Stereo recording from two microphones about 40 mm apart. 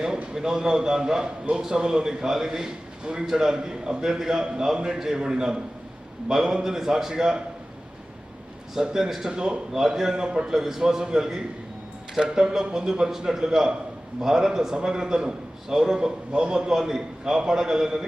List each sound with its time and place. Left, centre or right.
0.3 s a man's voice: centre
8.7 s a man's voice: centre
9.3 s speech: right
9.7 s a man's voice: centre